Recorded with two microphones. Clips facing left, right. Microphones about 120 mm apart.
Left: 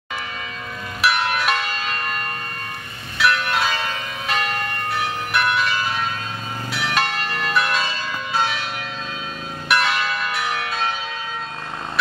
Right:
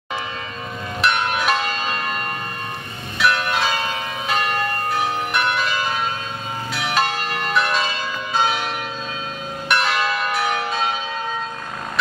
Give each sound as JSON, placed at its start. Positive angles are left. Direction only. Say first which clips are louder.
{"t": 1.0, "sound": "church bell", "louder": "even", "side_deg": 0}
{"t": 1.5, "sound": "church bell", "louder": "right 2 dB", "side_deg": -30}
{"t": 3.2, "sound": "church bell", "louder": "even", "side_deg": 0}
{"t": 6.7, "sound": "church bell", "louder": "right 2 dB", "side_deg": 0}
{"t": 9.7, "sound": "church bell", "louder": "left 1 dB", "side_deg": 0}